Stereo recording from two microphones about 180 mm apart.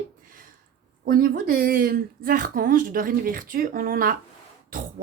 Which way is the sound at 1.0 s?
55° right (ahead or behind).